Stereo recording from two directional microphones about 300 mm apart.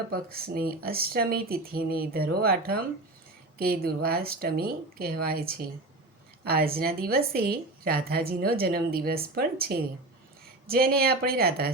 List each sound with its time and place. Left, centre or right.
0.1 s a woman's voice: right